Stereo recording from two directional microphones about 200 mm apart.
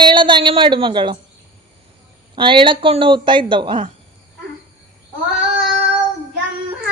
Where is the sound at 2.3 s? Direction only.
25° right (ahead or behind).